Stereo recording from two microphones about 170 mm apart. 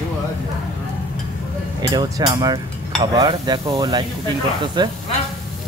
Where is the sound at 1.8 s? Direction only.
25° right (ahead or behind).